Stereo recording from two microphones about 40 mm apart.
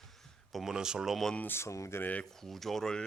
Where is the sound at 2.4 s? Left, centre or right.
Centre.